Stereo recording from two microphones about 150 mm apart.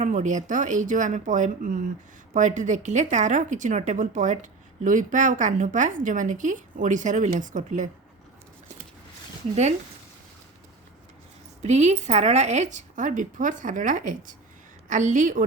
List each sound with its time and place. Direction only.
0.0 s a woman's voice: 55° right (ahead or behind)
11.6 s a woman's voice: 50° right (ahead or behind)